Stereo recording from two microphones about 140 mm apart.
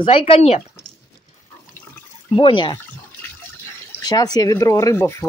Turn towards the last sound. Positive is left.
turn(degrees=20)  # may be behind; listen again after turning